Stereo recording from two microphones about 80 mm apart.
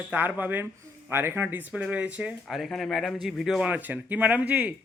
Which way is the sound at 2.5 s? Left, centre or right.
Centre.